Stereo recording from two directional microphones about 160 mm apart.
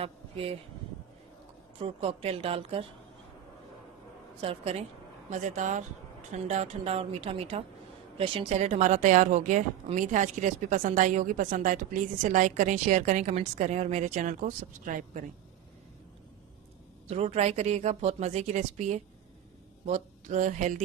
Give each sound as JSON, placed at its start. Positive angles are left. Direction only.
{"t": 0.0, "sound": "speech", "side_deg": -35}
{"t": 1.8, "sound": "a woman's voice", "side_deg": -35}
{"t": 4.4, "sound": "a woman's voice", "side_deg": -40}
{"t": 5.3, "sound": "a woman's voice", "side_deg": -50}
{"t": 17.1, "sound": "a woman's voice", "side_deg": -40}